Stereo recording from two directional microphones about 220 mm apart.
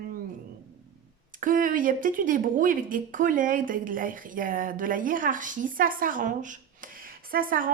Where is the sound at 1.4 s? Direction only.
40° right (ahead or behind).